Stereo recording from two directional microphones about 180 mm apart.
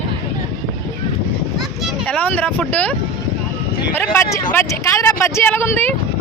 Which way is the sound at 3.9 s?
15° left (ahead or behind).